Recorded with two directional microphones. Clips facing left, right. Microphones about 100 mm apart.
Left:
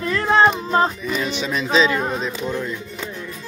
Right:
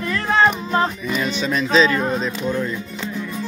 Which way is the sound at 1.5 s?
5° left (ahead or behind).